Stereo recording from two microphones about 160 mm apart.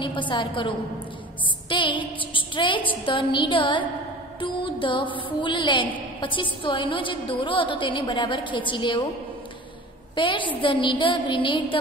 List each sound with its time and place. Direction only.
0.0 s a woman's voice: 30° left (ahead or behind)
4.4 s music: 30° left (ahead or behind)
6.2 s a woman's voice: 30° left (ahead or behind)
10.1 s a woman's voice: 30° left (ahead or behind)